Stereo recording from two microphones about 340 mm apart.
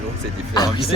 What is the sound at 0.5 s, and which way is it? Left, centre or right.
Speech, centre.